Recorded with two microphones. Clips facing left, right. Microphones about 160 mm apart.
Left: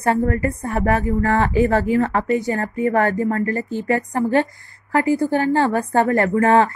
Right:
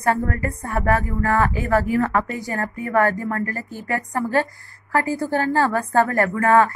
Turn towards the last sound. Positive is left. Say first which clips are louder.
# left 2 dB
turn(degrees=25)  # may be behind; listen again after turning